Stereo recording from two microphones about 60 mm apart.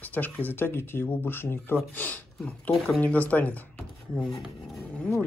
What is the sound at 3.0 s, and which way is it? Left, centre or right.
Speech, left.